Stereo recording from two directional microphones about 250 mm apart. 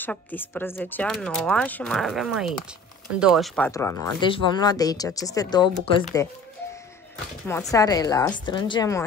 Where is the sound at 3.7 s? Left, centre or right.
Centre.